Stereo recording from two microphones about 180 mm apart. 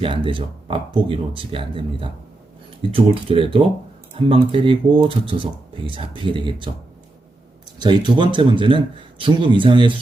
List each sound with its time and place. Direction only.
0.0 s speech: 30° right (ahead or behind)
7.8 s speech: 25° right (ahead or behind)